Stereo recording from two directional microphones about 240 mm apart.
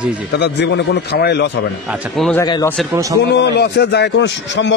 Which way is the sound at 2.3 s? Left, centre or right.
Centre.